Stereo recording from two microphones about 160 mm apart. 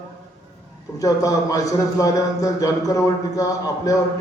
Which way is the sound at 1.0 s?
20° left (ahead or behind).